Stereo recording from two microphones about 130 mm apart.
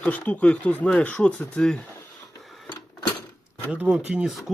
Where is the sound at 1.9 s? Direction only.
20° left (ahead or behind).